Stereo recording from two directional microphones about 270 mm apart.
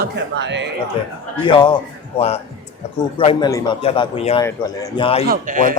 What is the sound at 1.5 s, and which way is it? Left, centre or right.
Speech, centre.